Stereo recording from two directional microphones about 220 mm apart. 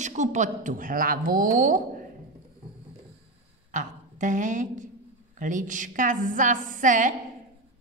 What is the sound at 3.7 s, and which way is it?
A woman's voice, 35° right (ahead or behind).